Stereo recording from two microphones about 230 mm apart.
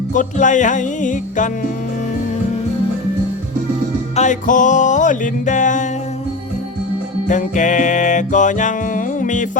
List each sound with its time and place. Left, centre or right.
0.1 s music: left
4.1 s music: left
7.3 s music: left